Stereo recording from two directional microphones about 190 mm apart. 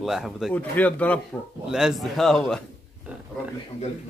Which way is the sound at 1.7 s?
5° right (ahead or behind).